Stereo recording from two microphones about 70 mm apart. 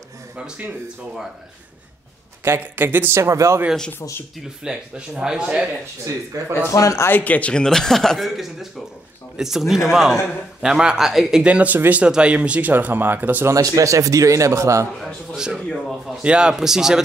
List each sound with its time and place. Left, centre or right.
2.4 s speech: right
3.2 s a man's voice: right
4.6 s speech: centre
6.3 s a man's voice: right
6.7 s speech: left
7.1 s a man's voice: left; by 13.5 s right
13.6 s a man's voice: right
15.3 s speech: centre
16.2 s speech: centre